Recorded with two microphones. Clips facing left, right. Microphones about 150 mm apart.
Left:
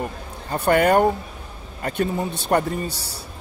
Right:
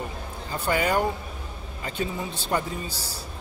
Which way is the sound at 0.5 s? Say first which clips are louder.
Left 8 dB; 60° left (ahead or behind).